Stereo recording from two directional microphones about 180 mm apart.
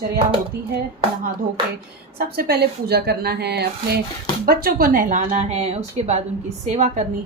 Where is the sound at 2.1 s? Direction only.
60° right (ahead or behind).